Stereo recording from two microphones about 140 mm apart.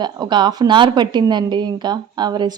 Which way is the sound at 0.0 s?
30° right (ahead or behind).